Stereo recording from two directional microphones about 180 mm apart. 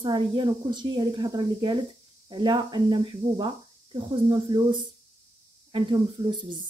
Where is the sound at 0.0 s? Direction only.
25° right (ahead or behind).